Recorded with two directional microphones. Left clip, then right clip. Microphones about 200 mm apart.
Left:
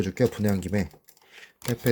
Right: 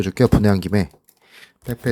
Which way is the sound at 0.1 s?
30° right (ahead or behind).